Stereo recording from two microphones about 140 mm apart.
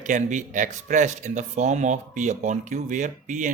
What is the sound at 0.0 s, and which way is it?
A man's voice, 60° right (ahead or behind).